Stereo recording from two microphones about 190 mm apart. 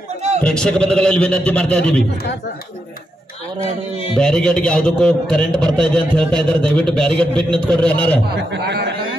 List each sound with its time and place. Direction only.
0.4 s a man's voice: 5° left (ahead or behind)
4.2 s a man's voice: 5° left (ahead or behind)
8.3 s speech: 65° right (ahead or behind)